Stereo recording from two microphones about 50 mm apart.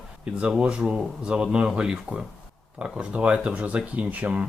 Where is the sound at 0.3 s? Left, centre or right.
Right.